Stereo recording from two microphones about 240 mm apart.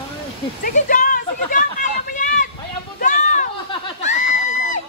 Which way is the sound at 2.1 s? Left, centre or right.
Left.